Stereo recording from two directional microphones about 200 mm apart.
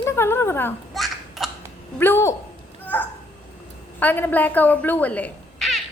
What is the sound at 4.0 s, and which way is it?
Speech, 10° left (ahead or behind).